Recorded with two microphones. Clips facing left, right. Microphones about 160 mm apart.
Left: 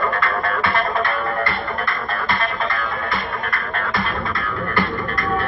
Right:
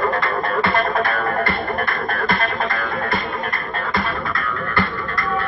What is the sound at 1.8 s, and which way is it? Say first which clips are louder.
Music: right 2 dB; 50° right (ahead or behind).